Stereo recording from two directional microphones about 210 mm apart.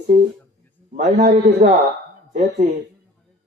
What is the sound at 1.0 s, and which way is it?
Speech, 35° right (ahead or behind).